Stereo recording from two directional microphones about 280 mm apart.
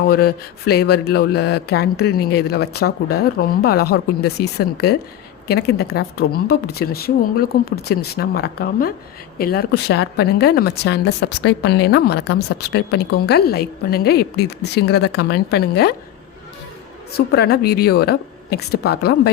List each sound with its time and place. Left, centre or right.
0.1 s speech: left
17.1 s speech: left